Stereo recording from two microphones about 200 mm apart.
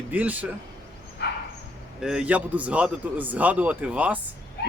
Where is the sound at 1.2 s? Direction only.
55° left (ahead or behind).